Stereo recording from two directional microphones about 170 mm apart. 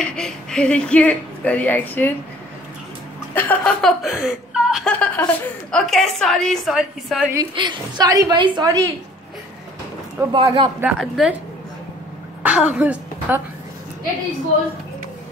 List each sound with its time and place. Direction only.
0.0 s speech: 5° left (ahead or behind)
3.3 s chuckle: 10° left (ahead or behind)
4.9 s a woman's voice: 5° left (ahead or behind)
7.3 s a woman's voice: 25° right (ahead or behind)
10.3 s a woman's voice: 30° right (ahead or behind)
10.8 s a woman's voice: 5° right (ahead or behind)
12.4 s a woman's voice: 5° right (ahead or behind)